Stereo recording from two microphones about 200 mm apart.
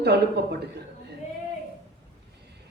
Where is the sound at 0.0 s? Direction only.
55° right (ahead or behind).